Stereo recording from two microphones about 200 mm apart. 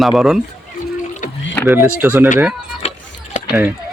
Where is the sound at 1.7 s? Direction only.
10° right (ahead or behind).